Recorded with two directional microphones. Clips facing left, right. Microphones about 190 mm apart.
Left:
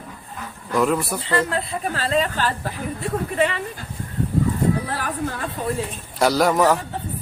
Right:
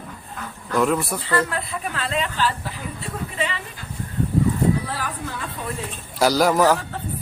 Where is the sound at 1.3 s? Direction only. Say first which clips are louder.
Left 1 dB; 25° left (ahead or behind); by 3.6 s 50° left (ahead or behind).